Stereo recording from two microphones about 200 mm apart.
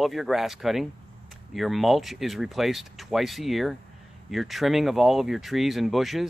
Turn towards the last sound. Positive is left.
turn(degrees=0)  # may be behind; listen again after turning